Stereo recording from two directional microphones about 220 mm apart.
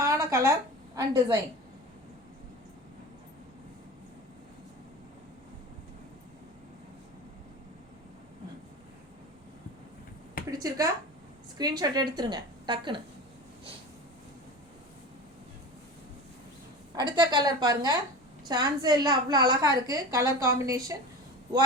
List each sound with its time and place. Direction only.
0.0 s a sound: 15° right (ahead or behind)
0.9 s a woman's voice: 15° right (ahead or behind)
10.6 s a woman's voice: 15° right (ahead or behind)
16.9 s a woman's voice: 20° right (ahead or behind)